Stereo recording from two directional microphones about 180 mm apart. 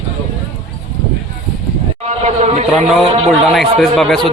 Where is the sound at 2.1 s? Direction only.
40° right (ahead or behind).